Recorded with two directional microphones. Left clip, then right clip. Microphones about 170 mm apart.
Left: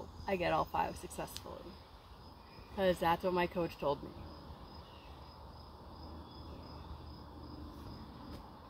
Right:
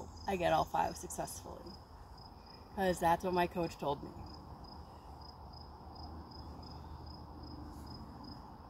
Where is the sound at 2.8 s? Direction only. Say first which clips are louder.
Even; 20° right (ahead or behind).